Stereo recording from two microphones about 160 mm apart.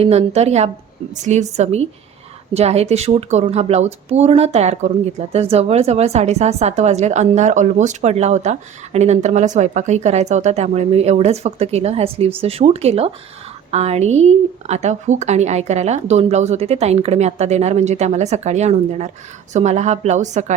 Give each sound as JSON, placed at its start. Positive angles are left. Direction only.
{"t": 0.0, "sound": "speech", "side_deg": -40}